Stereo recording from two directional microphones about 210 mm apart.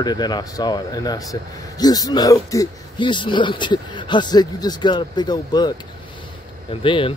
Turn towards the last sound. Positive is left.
turn(degrees=25)  # may be behind; listen again after turning